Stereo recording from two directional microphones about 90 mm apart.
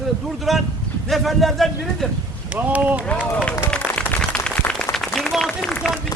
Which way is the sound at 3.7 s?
15° left (ahead or behind).